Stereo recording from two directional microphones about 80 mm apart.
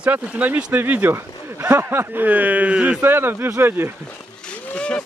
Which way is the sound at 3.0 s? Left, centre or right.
Right.